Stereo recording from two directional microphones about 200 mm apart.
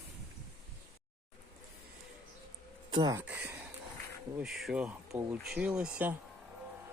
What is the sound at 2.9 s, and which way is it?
Speech, 20° right (ahead or behind).